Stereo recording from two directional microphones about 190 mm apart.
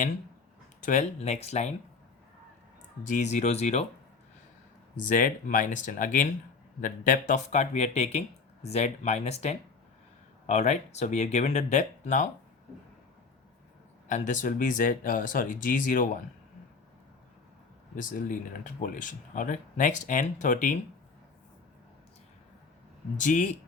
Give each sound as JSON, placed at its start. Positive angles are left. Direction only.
{"t": 0.8, "sound": "speech", "side_deg": 40}
{"t": 3.0, "sound": "speech", "side_deg": 40}
{"t": 5.0, "sound": "speech", "side_deg": 45}
{"t": 14.1, "sound": "speech", "side_deg": 40}
{"t": 17.9, "sound": "speech", "side_deg": 45}
{"t": 23.1, "sound": "speech", "side_deg": 40}